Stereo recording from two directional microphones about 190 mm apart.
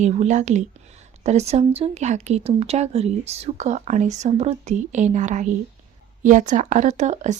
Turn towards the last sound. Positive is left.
turn(degrees=-40)  # may be behind; listen again after turning